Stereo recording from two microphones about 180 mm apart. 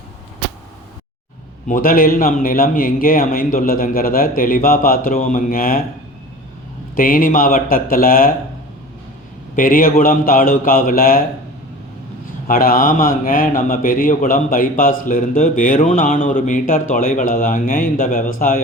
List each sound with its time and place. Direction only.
1.6 s a man's voice: 50° left (ahead or behind)
6.9 s a man's voice: 50° left (ahead or behind)
9.6 s a man's voice: 50° left (ahead or behind)
12.5 s a man's voice: 55° left (ahead or behind)